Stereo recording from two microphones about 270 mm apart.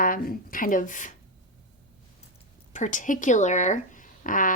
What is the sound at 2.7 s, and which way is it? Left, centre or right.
Speech, left.